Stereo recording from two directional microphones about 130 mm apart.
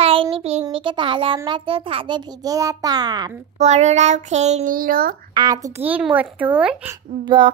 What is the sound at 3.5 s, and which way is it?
Child singing, 60° right (ahead or behind).